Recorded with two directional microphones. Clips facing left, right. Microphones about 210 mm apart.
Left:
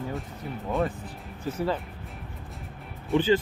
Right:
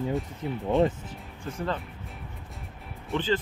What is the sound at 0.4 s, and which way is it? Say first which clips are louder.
Speech: right 4 dB; 20° right (ahead or behind).